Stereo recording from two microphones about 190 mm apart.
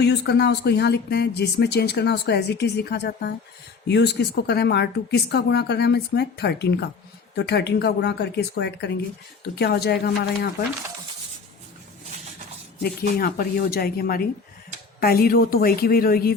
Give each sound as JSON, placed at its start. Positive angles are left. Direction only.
{"t": 0.0, "sound": "speech", "side_deg": 60}
{"t": 12.8, "sound": "a woman's voice", "side_deg": 55}